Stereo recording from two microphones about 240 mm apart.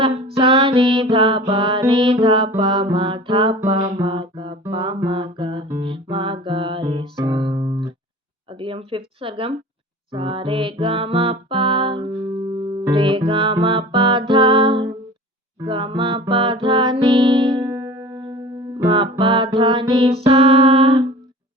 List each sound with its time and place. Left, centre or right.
0.3 s music: right
5.6 s guitar: centre
5.9 s music: right
8.5 s speech: right
10.1 s music: right